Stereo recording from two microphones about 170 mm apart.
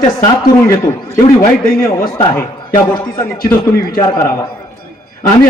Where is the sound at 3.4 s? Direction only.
20° left (ahead or behind).